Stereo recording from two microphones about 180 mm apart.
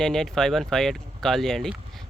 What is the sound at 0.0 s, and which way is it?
Speech, centre (ahead or behind).